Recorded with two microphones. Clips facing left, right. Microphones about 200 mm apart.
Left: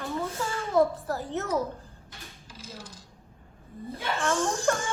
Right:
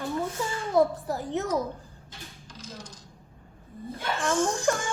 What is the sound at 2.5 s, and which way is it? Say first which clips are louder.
Coin: right 1 dB; 5° left (ahead or behind).